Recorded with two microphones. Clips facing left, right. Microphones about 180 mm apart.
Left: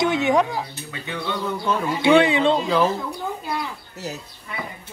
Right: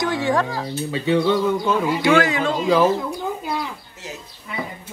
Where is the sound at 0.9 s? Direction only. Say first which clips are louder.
Right 12 dB; 15° right (ahead or behind).